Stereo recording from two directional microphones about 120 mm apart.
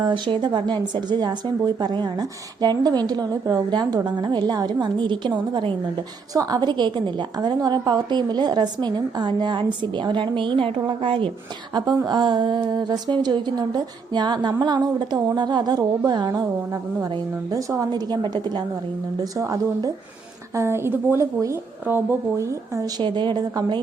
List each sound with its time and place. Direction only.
0.0 s speech: 40° right (ahead or behind)
11.7 s speech: 35° right (ahead or behind)
17.5 s speech: 30° right (ahead or behind)